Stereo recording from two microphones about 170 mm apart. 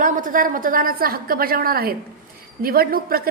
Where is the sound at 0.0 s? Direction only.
50° right (ahead or behind).